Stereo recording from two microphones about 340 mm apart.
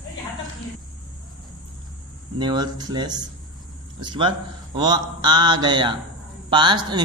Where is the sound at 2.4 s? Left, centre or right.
Centre.